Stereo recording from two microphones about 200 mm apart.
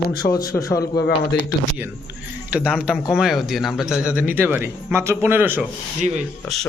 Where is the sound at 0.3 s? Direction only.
20° left (ahead or behind).